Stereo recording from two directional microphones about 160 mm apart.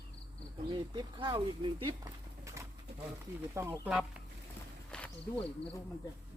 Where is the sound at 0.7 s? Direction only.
30° right (ahead or behind).